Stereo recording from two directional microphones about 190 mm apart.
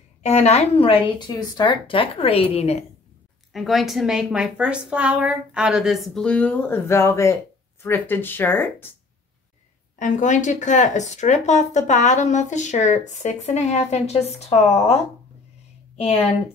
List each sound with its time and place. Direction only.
0.2 s speech: 35° left (ahead or behind)
3.5 s a woman's voice: centre (ahead or behind)
9.9 s speech: 40° left (ahead or behind)
16.0 s speech: 35° left (ahead or behind)